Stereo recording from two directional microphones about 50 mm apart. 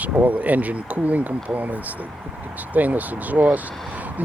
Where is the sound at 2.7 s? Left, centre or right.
Right.